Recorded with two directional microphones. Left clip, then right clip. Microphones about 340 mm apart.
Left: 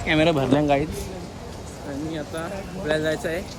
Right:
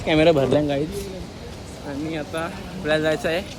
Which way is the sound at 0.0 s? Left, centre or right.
Centre.